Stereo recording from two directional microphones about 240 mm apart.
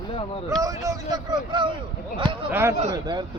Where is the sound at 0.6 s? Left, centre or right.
Centre.